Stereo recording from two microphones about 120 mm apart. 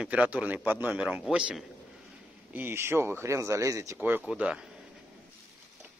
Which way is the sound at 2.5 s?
20° right (ahead or behind).